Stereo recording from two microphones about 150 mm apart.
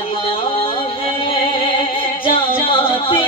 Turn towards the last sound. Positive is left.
turn(degrees=35)  # may be behind; listen again after turning